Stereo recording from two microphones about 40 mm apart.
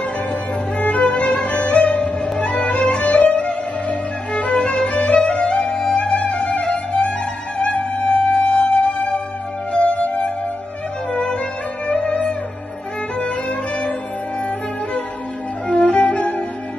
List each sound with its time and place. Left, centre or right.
0.3 s music: left
1.1 s music: left
11.9 s music: left
15.8 s music: left